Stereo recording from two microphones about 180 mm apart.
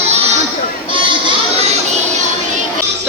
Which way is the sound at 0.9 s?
25° right (ahead or behind).